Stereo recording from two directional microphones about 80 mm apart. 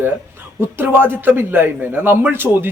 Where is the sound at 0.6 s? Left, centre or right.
Right.